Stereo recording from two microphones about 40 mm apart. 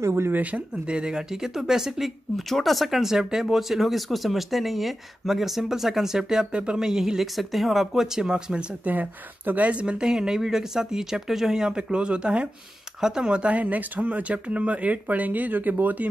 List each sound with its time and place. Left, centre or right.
0.3 s speech: right
0.8 s speech: right
6.5 s speech: right
6.8 s speech: centre
7.3 s speech: centre
7.9 s speech: centre
8.8 s speech: right
9.9 s speech: centre
13.0 s speech: centre
13.3 s speech: right